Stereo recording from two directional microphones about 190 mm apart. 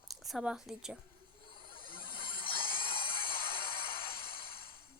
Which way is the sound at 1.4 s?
25° left (ahead or behind).